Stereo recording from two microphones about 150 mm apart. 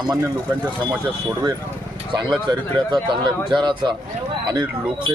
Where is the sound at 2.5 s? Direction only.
30° right (ahead or behind).